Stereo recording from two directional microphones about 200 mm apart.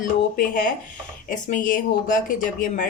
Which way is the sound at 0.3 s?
40° left (ahead or behind).